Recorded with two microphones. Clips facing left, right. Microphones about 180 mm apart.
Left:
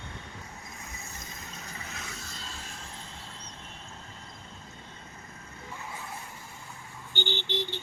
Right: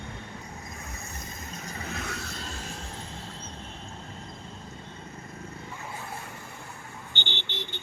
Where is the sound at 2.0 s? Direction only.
70° right (ahead or behind).